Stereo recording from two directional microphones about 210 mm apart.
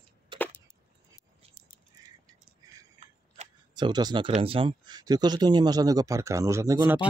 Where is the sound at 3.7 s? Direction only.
20° right (ahead or behind).